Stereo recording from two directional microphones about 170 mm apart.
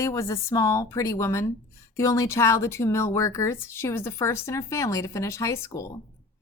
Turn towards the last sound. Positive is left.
turn(degrees=15)  # may be behind; listen again after turning